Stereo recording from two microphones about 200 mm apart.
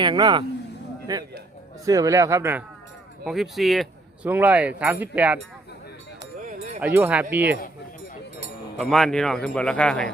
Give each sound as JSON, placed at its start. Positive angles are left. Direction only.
{"t": 0.0, "sound": "a man's voice", "side_deg": -20}
{"t": 3.2, "sound": "speech", "side_deg": 0}
{"t": 6.7, "sound": "speech", "side_deg": -10}
{"t": 8.9, "sound": "speech", "side_deg": 0}